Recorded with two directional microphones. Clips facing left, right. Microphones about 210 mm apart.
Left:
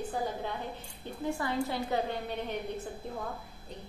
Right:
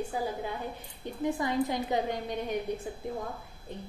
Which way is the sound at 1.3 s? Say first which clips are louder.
Right 3 dB; 15° right (ahead or behind).